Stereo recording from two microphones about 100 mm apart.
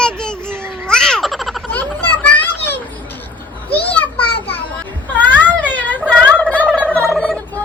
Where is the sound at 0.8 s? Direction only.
5° left (ahead or behind).